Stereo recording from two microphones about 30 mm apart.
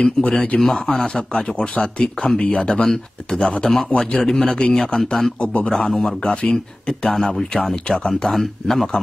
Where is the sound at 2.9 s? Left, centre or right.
Centre.